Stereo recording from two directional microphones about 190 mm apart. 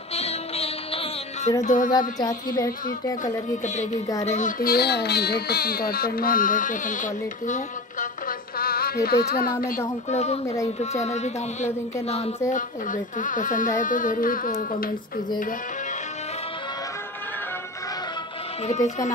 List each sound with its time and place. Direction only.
0.1 s music: 35° left (ahead or behind)
1.6 s speech: 40° left (ahead or behind)
1.9 s a sound: 20° left (ahead or behind)
2.6 s speech: 20° left (ahead or behind)
3.6 s speech: 40° left (ahead or behind)
10.0 s speech: 35° left (ahead or behind)
10.4 s speech: 15° left (ahead or behind)
10.8 s speech: 35° left (ahead or behind)